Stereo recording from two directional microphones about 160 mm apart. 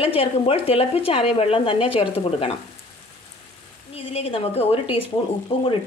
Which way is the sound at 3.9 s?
40° left (ahead or behind).